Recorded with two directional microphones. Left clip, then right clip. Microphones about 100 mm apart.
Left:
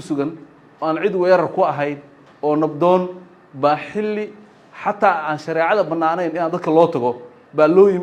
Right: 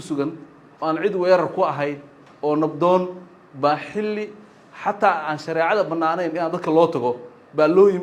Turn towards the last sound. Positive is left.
turn(degrees=45)  # may be behind; listen again after turning